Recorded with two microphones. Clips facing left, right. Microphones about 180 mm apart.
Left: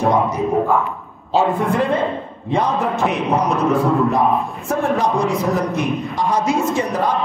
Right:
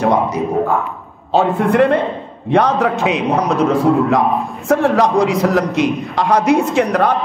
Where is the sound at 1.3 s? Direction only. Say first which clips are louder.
Right 3 dB; 65° right (ahead or behind); by 3.2 s 80° right.